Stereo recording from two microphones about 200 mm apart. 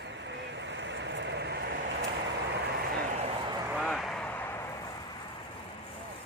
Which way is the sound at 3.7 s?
Centre (ahead or behind).